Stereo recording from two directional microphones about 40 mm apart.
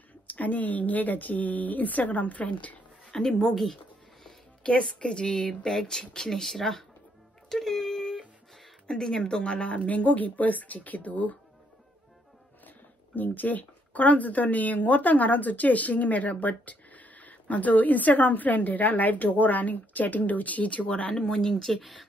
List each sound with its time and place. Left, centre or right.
0.3 s speech: left
3.1 s speech: centre
3.6 s a sound: centre
4.6 s a woman's voice: left; by 6.8 s centre
7.4 s a sound: centre
8.8 s speech: centre; by 11.3 s left
12.6 s speech: left
21.1 s speech: centre
21.7 s speech: centre